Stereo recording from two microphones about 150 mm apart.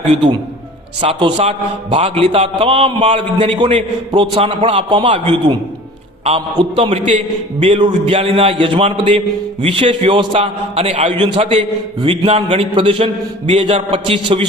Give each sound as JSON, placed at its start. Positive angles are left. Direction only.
{"t": 0.1, "sound": "a man's voice", "side_deg": -30}
{"t": 6.6, "sound": "a man's voice", "side_deg": -35}
{"t": 11.2, "sound": "a man's voice", "side_deg": -35}